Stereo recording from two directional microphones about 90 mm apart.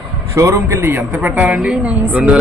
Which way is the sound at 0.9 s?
20° right (ahead or behind).